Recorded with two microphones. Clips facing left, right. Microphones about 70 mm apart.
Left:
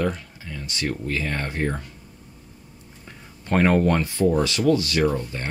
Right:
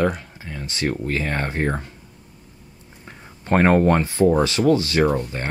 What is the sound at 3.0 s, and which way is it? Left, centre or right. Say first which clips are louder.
Speech: right 5 dB; right.